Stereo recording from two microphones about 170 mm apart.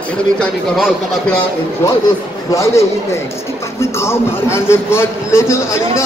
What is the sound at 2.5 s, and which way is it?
A man's voice, 15° left (ahead or behind).